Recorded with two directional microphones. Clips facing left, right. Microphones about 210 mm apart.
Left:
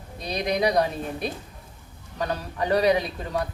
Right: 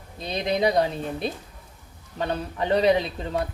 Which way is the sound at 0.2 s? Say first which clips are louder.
Right 1 dB; 25° right (ahead or behind).